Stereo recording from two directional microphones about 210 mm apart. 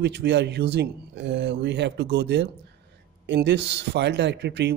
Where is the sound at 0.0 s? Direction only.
55° right (ahead or behind).